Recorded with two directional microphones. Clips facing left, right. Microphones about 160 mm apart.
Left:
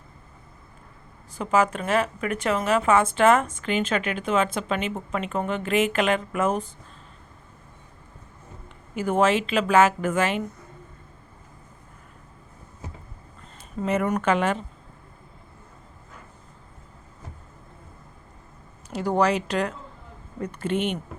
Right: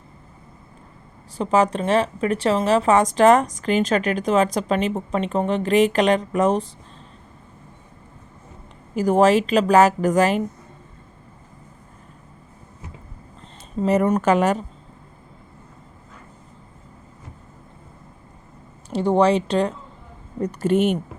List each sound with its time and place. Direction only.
1.3 s a woman's voice: 35° right (ahead or behind)
9.0 s a woman's voice: 40° right (ahead or behind)
13.8 s a woman's voice: 35° right (ahead or behind)
18.9 s a woman's voice: 25° right (ahead or behind)